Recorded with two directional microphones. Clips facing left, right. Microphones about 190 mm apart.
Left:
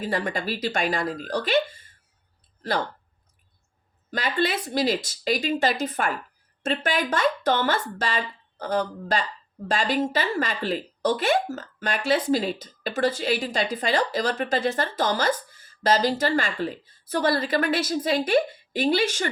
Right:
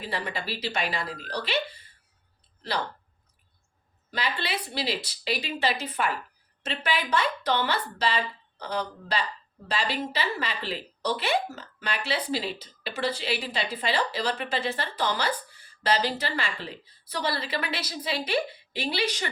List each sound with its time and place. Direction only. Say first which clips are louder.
0.0 s speech: left 6 dB; 45° left (ahead or behind)
4.1 s speech: left 6 dB; 45° left (ahead or behind)